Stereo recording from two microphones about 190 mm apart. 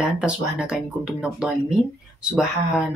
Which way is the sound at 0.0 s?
5° right (ahead or behind).